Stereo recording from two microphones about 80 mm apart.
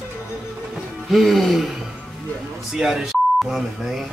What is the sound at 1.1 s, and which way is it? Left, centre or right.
Speech, centre.